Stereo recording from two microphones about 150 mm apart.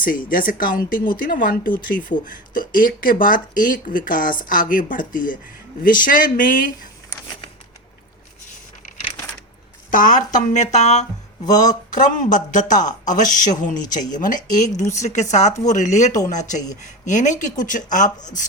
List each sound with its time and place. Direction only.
0.0 s speech: 70° left (ahead or behind)
9.9 s speech: 60° left (ahead or behind)